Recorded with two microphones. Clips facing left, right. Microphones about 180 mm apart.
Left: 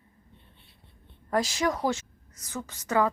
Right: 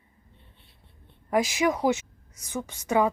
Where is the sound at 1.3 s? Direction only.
15° right (ahead or behind).